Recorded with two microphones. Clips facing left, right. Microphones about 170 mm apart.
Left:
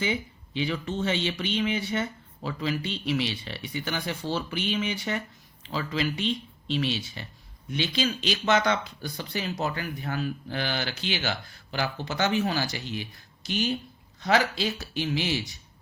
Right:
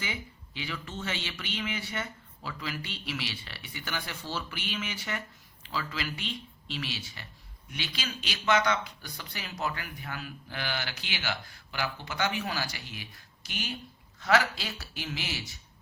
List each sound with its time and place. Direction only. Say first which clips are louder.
0.0 s speech: left 9 dB; 25° left (ahead or behind)
14.3 s speech: left 3 dB; 20° left (ahead or behind)